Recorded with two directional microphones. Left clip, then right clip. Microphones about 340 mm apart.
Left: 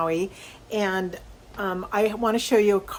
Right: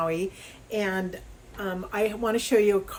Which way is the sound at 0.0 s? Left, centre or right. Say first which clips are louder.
Left 3 dB; centre.